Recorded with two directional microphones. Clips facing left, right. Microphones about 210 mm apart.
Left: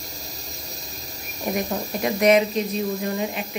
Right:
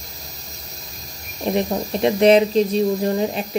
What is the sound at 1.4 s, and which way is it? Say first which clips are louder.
Speech: right 5 dB; 25° right (ahead or behind).